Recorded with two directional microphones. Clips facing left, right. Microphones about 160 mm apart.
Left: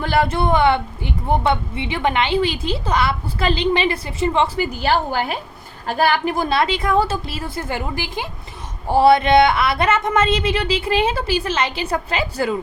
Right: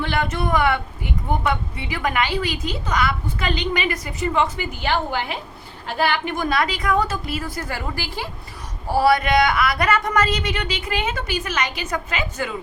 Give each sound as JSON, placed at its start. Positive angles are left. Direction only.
{"t": 0.0, "sound": "speech", "side_deg": 35}